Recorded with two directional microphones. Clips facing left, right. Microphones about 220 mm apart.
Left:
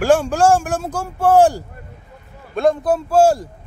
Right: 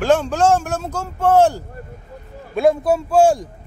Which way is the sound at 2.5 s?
Centre (ahead or behind).